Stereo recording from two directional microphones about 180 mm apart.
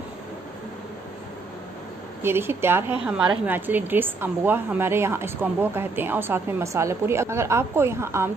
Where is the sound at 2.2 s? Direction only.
15° right (ahead or behind).